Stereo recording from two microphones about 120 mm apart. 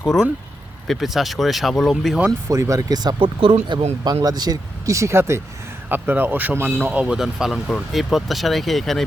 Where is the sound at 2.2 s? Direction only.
30° right (ahead or behind); by 3.5 s 45° right (ahead or behind).